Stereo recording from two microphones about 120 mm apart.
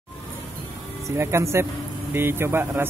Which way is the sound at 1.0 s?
25° right (ahead or behind).